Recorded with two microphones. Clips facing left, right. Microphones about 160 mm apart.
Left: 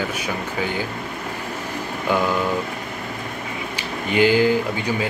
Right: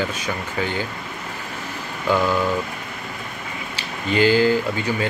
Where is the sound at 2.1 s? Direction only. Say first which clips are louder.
Right 1 dB; 15° left (ahead or behind).